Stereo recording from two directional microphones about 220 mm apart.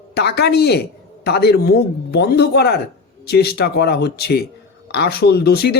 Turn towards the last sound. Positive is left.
turn(degrees=45)  # may be behind; listen again after turning